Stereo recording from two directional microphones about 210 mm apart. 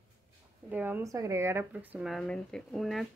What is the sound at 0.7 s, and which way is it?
Speech, 10° right (ahead or behind).